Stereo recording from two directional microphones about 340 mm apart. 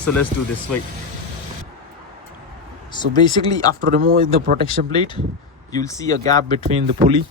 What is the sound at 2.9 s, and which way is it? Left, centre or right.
Speech, centre.